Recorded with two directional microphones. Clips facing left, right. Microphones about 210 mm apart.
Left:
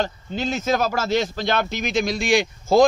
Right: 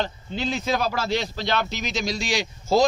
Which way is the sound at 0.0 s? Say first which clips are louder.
Left 2 dB; 45° left (ahead or behind).